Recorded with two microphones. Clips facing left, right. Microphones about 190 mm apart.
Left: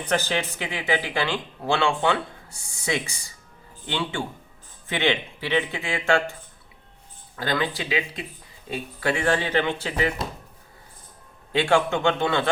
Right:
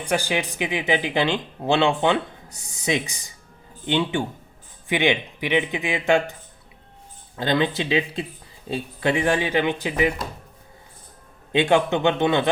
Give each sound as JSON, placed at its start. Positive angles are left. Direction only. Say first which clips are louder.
{"t": 0.0, "sound": "speech", "louder": "right 1 dB", "side_deg": -10}
{"t": 7.3, "sound": "speech", "louder": "right 4 dB", "side_deg": -20}
{"t": 11.5, "sound": "speech", "louder": "right 2 dB", "side_deg": -20}